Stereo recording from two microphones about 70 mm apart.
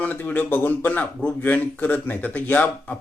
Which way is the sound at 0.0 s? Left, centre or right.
Left.